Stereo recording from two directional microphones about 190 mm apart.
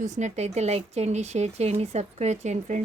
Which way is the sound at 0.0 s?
40° right (ahead or behind).